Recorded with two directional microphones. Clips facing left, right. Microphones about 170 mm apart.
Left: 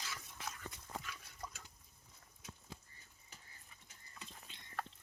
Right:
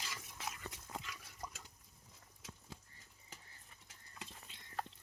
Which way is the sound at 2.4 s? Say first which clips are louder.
Even; 90° right.